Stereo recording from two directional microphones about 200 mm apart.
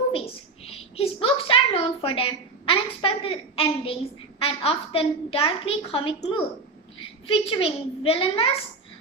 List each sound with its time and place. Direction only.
0.7 s a woman's voice: 30° left (ahead or behind)